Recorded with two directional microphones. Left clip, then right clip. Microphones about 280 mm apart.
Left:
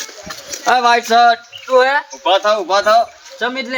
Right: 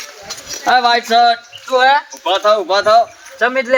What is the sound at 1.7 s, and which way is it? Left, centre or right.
Speech, right.